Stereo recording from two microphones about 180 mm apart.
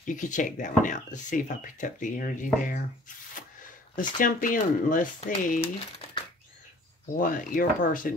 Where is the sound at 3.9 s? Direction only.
50° left (ahead or behind).